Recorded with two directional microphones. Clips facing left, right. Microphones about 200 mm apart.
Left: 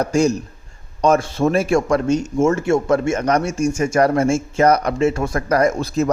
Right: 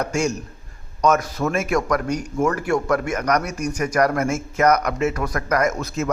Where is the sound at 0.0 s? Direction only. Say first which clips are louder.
Left 6 dB; 35° left (ahead or behind).